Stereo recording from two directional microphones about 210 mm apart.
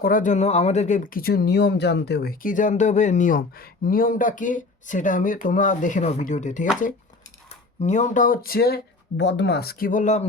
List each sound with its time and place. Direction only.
0.0 s speech: 40° left (ahead or behind)
7.8 s speech: 35° left (ahead or behind)